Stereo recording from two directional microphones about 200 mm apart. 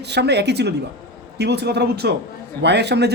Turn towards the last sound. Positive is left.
turn(degrees=-55)  # may be behind; listen again after turning